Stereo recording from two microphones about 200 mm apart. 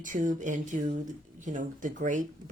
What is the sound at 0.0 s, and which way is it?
Speech, 40° right (ahead or behind).